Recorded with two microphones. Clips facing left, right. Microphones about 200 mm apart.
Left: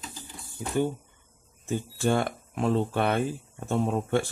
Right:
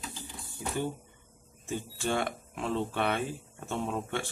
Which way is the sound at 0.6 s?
45° left (ahead or behind).